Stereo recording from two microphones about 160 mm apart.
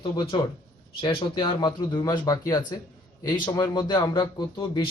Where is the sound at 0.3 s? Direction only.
30° left (ahead or behind).